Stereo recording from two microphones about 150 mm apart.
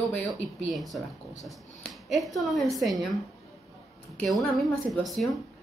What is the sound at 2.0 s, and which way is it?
Speech, centre (ahead or behind).